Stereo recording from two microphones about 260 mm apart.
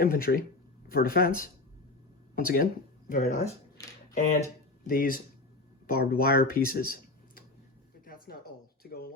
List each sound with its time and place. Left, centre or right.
0.0 s speech: left
4.8 s speech: left
8.0 s a sound: left